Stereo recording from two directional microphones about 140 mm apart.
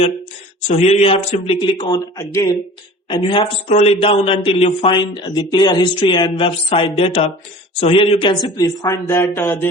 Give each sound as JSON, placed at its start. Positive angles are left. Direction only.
{"t": 0.8, "sound": "a man's voice", "side_deg": 45}
{"t": 3.1, "sound": "a man's voice", "side_deg": 40}